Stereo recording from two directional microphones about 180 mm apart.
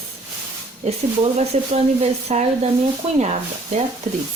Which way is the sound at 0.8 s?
35° right (ahead or behind).